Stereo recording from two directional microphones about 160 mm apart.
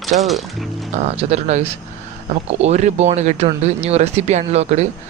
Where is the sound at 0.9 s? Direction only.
45° right (ahead or behind).